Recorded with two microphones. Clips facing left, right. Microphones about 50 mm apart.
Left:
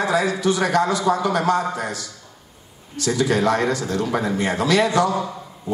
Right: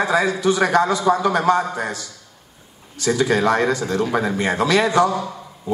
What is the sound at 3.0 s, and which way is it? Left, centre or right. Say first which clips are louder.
A man's voice: right 2 dB; right.